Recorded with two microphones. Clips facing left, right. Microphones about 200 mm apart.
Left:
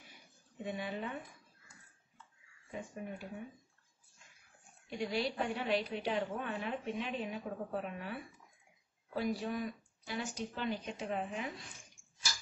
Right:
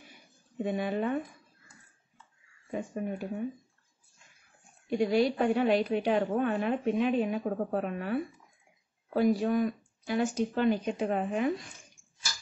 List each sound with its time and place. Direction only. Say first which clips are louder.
0.7 s a woman's voice: right 10 dB; 55° right (ahead or behind)
2.7 s a woman's voice: right 9 dB; 60° right (ahead or behind)
4.8 s a woman's voice: right 11 dB; 50° right (ahead or behind)